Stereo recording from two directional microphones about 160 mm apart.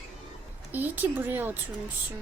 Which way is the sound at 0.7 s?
10° right (ahead or behind).